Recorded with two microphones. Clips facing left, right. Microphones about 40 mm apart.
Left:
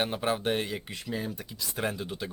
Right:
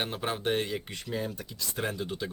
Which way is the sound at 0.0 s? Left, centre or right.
Centre.